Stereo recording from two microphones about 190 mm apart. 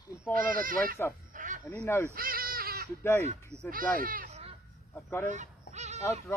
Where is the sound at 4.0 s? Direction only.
45° right (ahead or behind).